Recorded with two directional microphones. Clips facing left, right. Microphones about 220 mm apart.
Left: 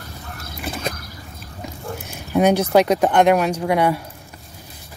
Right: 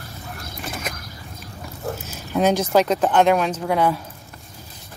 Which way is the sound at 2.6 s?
10° left (ahead or behind).